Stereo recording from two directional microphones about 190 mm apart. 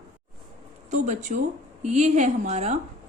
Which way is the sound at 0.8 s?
40° right (ahead or behind).